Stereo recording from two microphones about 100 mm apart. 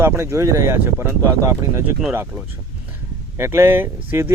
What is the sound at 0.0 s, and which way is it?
Speech, 25° right (ahead or behind).